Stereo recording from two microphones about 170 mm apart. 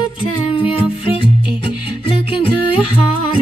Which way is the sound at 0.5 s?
30° left (ahead or behind).